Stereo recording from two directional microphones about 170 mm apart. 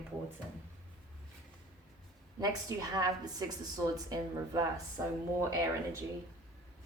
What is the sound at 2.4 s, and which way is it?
Speech, 20° right (ahead or behind).